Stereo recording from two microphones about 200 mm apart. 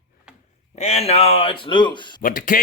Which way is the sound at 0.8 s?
30° left (ahead or behind).